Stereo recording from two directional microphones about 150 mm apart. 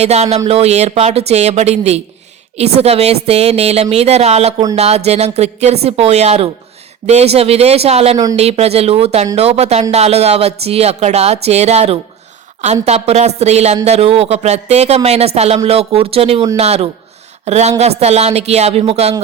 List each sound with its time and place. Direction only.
0.0 s a woman's voice: 45° right (ahead or behind)